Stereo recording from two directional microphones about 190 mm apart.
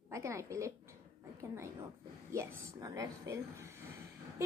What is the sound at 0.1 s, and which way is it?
A woman's voice, 15° right (ahead or behind).